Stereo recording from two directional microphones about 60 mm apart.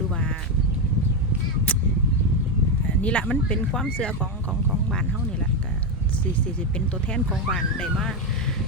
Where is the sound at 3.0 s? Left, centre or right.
Left.